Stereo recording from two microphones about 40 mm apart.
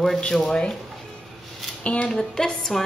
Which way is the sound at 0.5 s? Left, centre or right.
Left.